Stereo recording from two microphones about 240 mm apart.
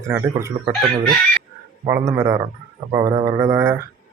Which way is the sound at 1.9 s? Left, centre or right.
Centre.